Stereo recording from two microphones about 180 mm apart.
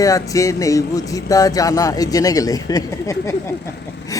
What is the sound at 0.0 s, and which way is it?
Speech, 20° left (ahead or behind).